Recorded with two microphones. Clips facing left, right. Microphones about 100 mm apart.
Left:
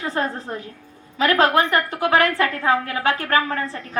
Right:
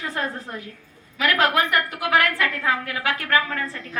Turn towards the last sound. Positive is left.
turn(degrees=35)  # may be behind; listen again after turning